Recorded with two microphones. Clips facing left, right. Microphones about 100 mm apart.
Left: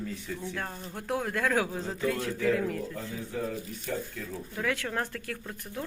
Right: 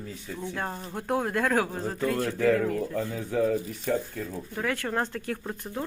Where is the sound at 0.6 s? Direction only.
30° right (ahead or behind).